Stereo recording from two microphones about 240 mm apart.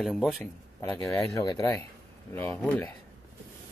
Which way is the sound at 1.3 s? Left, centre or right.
Centre.